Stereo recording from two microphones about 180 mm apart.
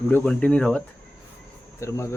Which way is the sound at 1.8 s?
15° left (ahead or behind).